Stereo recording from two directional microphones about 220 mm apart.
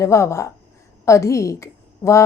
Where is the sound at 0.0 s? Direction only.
15° left (ahead or behind).